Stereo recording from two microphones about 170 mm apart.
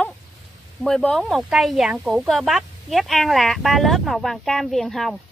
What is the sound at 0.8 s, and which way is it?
Speech, 5° left (ahead or behind).